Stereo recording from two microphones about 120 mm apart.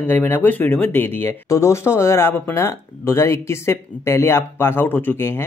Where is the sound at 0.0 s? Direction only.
15° left (ahead or behind).